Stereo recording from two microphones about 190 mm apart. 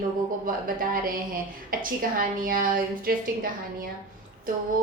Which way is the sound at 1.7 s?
50° right (ahead or behind).